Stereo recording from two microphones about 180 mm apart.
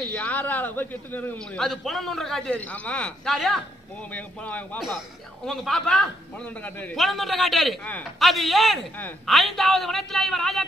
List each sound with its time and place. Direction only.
0.1 s a man's voice: 10° left (ahead or behind)